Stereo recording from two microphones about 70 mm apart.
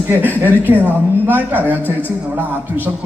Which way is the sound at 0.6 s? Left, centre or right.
Right.